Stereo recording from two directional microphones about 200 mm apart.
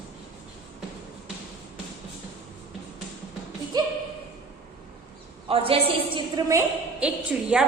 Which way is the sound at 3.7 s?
20° right (ahead or behind).